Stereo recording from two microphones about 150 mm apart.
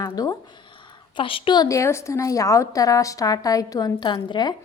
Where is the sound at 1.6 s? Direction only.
20° left (ahead or behind).